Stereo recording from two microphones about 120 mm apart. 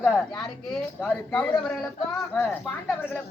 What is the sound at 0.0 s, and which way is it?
A woman's voice, centre (ahead or behind).